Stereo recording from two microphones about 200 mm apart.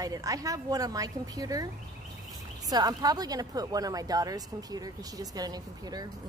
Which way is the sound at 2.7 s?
20° right (ahead or behind).